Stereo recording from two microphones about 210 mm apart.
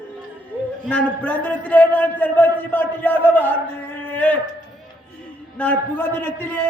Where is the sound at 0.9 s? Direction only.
5° left (ahead or behind).